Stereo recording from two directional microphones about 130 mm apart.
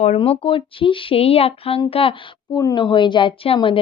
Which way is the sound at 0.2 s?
45° left (ahead or behind).